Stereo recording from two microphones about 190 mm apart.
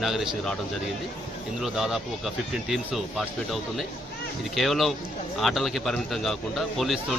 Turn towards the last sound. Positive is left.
turn(degrees=0)  # may be behind; listen again after turning